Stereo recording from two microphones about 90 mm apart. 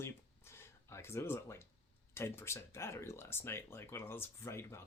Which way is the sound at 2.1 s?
30° left (ahead or behind).